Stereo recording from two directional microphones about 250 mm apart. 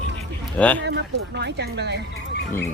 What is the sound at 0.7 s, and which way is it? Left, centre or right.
Speech, right.